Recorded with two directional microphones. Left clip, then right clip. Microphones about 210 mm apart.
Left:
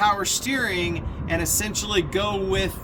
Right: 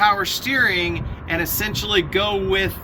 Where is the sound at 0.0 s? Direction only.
30° left (ahead or behind).